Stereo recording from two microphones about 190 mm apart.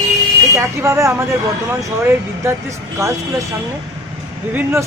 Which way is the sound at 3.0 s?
15° right (ahead or behind).